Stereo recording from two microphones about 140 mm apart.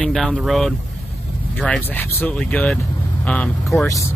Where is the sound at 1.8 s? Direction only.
15° left (ahead or behind).